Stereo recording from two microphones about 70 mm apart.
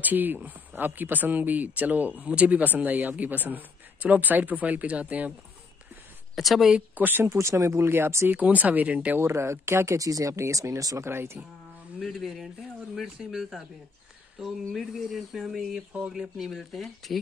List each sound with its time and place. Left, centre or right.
0.0 s speech: right
6.3 s speech: centre
7.0 s speech: right
7.2 s speech: right
8.3 s speech: right
9.2 s speech: right
11.1 s speech: right
12.0 s speech: centre